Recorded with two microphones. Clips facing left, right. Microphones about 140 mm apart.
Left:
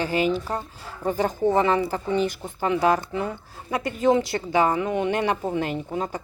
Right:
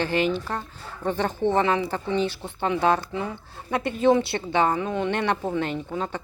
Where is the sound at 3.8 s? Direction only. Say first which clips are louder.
Right 1 dB; 65° right (ahead or behind).